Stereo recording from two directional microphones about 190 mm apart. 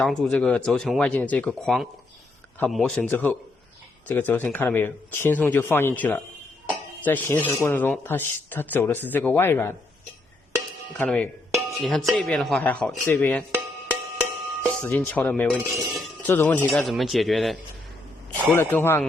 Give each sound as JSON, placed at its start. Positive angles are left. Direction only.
{"t": 0.0, "sound": "speech", "side_deg": 5}
{"t": 10.9, "sound": "dishes", "side_deg": 10}
{"t": 12.1, "sound": "speech", "side_deg": 0}
{"t": 14.6, "sound": "speech", "side_deg": 10}
{"t": 16.3, "sound": "speech", "side_deg": 10}
{"t": 18.5, "sound": "speech", "side_deg": 10}